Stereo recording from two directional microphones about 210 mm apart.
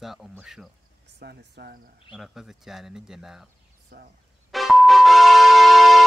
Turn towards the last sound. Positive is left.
turn(degrees=0)  # may be behind; listen again after turning